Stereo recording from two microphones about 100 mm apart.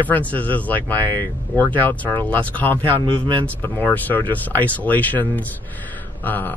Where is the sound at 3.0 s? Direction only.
55° right (ahead or behind).